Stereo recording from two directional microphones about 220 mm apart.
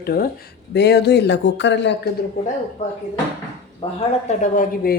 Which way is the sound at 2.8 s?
30° left (ahead or behind).